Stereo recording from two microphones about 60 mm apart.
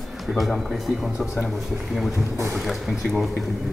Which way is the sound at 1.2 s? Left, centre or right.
Centre.